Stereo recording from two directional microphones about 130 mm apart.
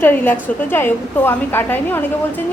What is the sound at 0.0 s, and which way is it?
A woman's voice, 15° left (ahead or behind).